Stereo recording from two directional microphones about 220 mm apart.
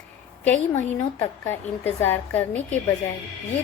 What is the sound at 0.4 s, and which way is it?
A woman's voice, 10° left (ahead or behind).